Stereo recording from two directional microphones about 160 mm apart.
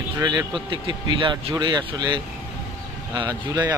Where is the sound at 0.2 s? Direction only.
25° right (ahead or behind).